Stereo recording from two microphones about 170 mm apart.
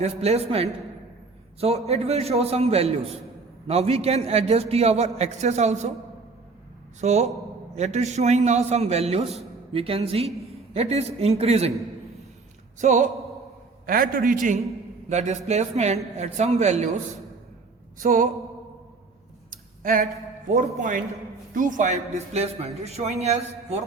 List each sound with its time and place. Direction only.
0.0 s speech: 40° right (ahead or behind)
7.0 s speech: 40° right (ahead or behind)
12.8 s speech: 45° right (ahead or behind)
13.8 s a man's voice: 60° right (ahead or behind); by 16.9 s 40° right (ahead or behind)
18.0 s speech: 50° right (ahead or behind)
19.5 s a sound: 55° right (ahead or behind)
21.5 s speech: 50° right (ahead or behind)